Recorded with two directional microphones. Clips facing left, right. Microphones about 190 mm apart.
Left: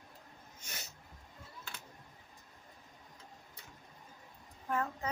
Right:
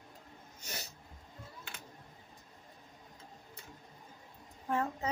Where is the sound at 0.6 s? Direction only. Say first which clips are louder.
Right 5 dB; 35° right (ahead or behind).